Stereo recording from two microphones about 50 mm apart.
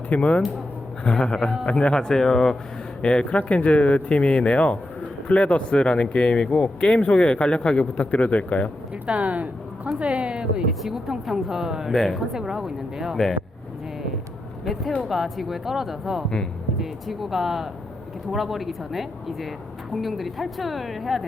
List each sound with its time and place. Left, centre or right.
0.1 s speech: left
9.0 s a woman's voice: right; by 11.9 s centre
11.9 s a woman's voice: centre
12.3 s a woman's voice: centre
14.6 s a woman's voice: centre